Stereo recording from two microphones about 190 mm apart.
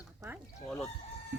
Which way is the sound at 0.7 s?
5° left (ahead or behind).